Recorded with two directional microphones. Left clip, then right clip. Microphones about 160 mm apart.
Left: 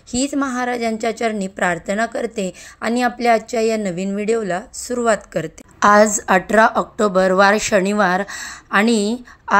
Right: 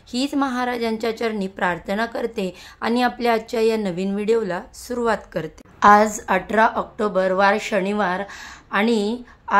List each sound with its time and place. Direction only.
0.1 s a woman's voice: 15° left (ahead or behind); by 9.6 s 30° left (ahead or behind)